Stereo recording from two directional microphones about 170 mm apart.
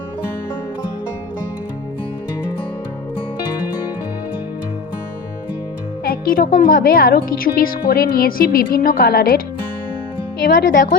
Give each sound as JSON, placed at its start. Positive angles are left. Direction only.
{"t": 6.1, "sound": "speech", "side_deg": 60}
{"t": 10.4, "sound": "speech", "side_deg": 60}